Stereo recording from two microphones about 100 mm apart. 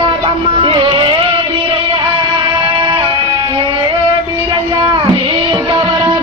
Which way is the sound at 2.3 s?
60° right (ahead or behind).